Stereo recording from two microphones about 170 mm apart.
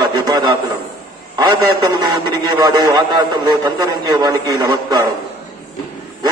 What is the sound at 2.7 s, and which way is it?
A man's voice, 25° right (ahead or behind).